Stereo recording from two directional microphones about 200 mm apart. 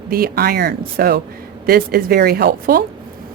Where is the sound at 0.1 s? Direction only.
50° right (ahead or behind).